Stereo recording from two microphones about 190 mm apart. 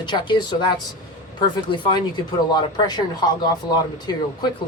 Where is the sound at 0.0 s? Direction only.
25° left (ahead or behind).